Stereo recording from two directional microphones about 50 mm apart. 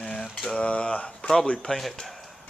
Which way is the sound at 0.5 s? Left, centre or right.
Left.